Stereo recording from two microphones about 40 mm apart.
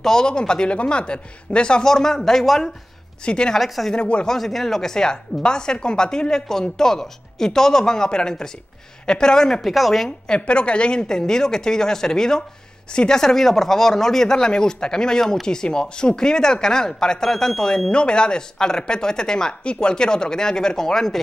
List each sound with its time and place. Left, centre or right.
0.0 s speech: centre
1.9 s speech: centre
3.3 s speech: left
3.5 s speech: centre
3.9 s speech: left
4.3 s speech: centre
9.7 s speech: centre
10.0 s speech: centre
10.4 s speech: left; by 21.2 s centre